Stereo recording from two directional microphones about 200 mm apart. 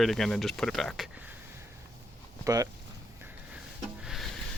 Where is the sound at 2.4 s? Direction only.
15° right (ahead or behind).